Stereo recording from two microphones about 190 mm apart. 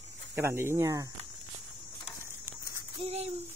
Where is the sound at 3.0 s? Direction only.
35° right (ahead or behind).